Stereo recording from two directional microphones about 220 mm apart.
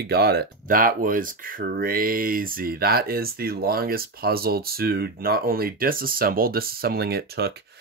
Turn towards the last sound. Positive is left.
turn(degrees=-45)  # may be behind; listen again after turning